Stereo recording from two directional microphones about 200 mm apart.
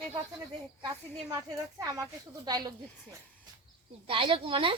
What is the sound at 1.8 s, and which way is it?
Speech, 20° right (ahead or behind).